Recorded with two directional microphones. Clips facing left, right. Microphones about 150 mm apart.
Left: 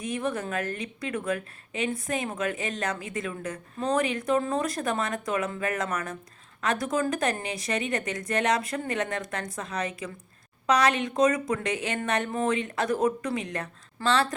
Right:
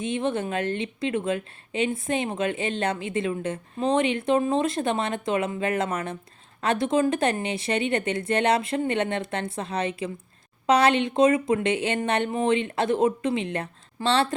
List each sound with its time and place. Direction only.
0.0 s a woman's voice: 25° right (ahead or behind)